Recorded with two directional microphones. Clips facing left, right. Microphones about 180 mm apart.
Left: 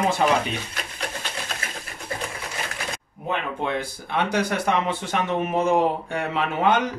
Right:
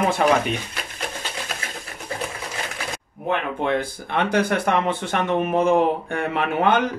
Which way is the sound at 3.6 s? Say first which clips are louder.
Right 4 dB; 55° right (ahead or behind).